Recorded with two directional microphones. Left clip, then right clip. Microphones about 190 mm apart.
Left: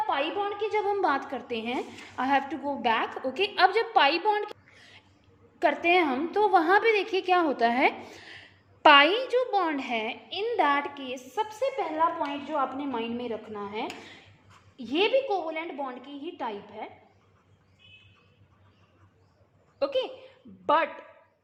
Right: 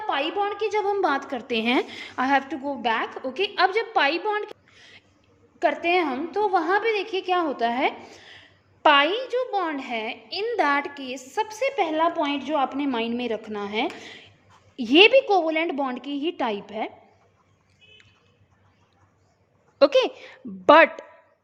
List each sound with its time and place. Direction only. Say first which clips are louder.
0.0 s a woman's voice: right 3 dB; 25° right (ahead or behind); by 1.8 s 45° right (ahead or behind)
2.1 s a woman's voice: right 3 dB; 30° right (ahead or behind)
5.5 s a woman's voice: right 1 dB; 10° right (ahead or behind)
10.2 s a woman's voice: right 3 dB; 15° right (ahead or behind)
11.4 s a woman's voice: right 7 dB; 50° right (ahead or behind)
19.8 s a woman's voice: right 10 dB; 70° right (ahead or behind)